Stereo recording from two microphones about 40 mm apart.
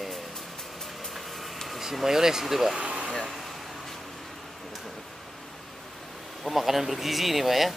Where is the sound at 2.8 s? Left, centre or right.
Right.